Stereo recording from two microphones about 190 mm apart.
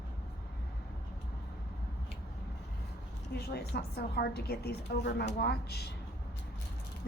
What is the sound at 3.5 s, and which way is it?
A woman's voice, 60° left (ahead or behind).